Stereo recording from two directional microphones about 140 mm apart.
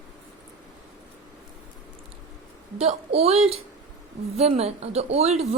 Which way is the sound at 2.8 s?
50° right (ahead or behind).